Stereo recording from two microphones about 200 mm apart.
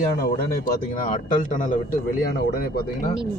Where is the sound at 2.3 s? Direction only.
50° left (ahead or behind).